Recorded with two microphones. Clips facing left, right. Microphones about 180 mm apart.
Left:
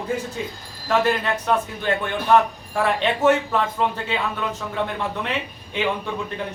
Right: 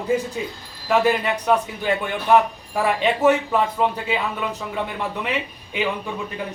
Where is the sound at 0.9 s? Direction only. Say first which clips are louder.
Right 2 dB; 10° right (ahead or behind).